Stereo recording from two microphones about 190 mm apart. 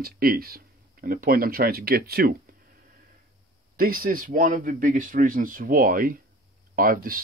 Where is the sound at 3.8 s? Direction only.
50° right (ahead or behind).